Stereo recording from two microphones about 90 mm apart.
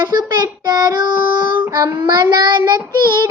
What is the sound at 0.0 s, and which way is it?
Child singing, 50° right (ahead or behind).